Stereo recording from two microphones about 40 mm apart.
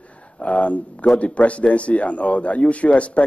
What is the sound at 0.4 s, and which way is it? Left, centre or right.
A man's voice, left.